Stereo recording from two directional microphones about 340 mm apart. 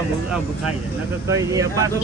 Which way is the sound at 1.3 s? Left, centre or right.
Centre.